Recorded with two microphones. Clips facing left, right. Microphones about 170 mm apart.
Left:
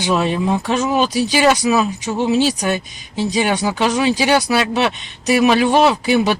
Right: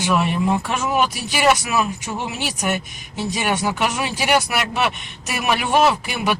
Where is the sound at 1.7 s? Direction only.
20° left (ahead or behind).